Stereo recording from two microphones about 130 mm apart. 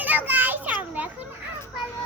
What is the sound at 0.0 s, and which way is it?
Children playing, 15° right (ahead or behind).